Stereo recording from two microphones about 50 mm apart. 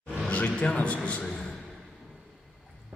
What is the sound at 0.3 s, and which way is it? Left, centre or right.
Speech, left.